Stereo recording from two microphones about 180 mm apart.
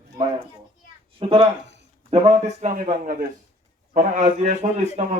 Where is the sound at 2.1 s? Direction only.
40° right (ahead or behind).